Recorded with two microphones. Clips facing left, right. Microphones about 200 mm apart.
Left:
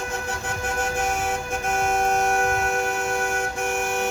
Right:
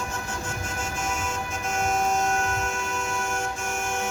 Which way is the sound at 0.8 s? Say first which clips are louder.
Left 6 dB; 60° left (ahead or behind).